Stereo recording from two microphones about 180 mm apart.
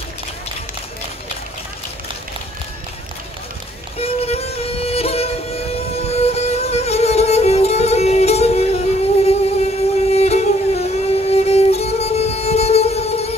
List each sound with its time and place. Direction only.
4.0 s music: 35° left (ahead or behind)